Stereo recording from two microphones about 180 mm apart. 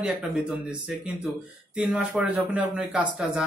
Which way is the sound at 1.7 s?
5° right (ahead or behind).